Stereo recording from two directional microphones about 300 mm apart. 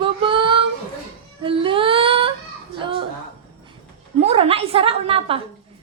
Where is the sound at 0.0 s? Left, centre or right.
Centre.